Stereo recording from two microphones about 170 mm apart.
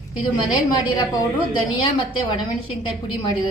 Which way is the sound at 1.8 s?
30° left (ahead or behind).